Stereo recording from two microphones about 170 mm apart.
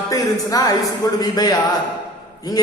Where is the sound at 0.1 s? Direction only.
20° left (ahead or behind).